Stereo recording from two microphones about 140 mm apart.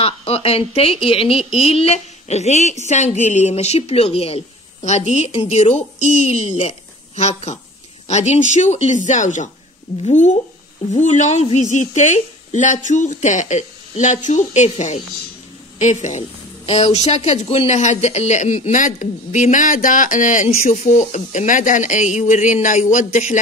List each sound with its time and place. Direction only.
0.0 s a woman's voice: 45° left (ahead or behind); by 23.4 s 60° left (ahead or behind)